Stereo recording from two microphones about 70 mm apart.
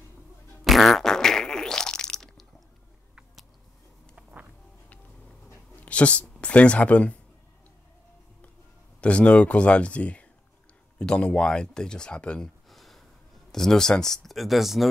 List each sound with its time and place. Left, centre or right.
0.7 s fart: centre
4.1 s music: right
5.8 s a sound: centre
6.4 s speech: centre
9.0 s speech: centre
12.6 s a sound: centre
13.5 s speech: centre